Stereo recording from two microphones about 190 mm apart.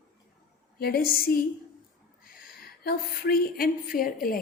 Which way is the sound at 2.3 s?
50° left (ahead or behind).